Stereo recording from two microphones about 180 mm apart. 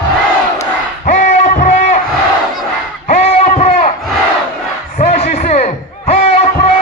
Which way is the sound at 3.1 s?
40° left (ahead or behind).